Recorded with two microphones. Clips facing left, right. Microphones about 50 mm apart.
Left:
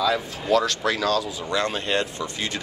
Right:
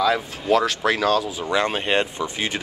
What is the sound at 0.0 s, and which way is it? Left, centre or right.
Speech, centre.